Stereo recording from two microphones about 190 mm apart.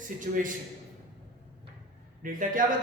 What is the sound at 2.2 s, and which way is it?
Speech, 45° right (ahead or behind).